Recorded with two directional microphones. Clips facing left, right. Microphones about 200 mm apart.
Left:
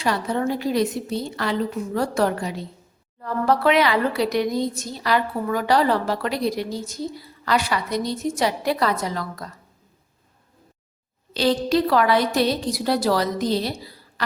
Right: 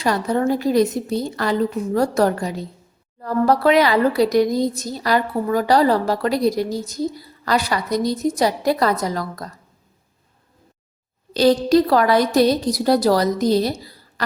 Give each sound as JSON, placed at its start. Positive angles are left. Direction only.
{"t": 0.0, "sound": "a woman's voice", "side_deg": -40}
{"t": 11.3, "sound": "a woman's voice", "side_deg": -40}